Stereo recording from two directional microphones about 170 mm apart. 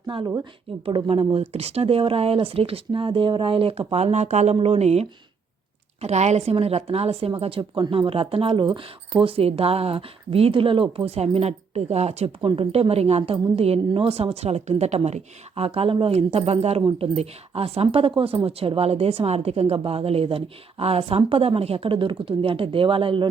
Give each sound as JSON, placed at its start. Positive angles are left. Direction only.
{"t": 0.1, "sound": "speech", "side_deg": -30}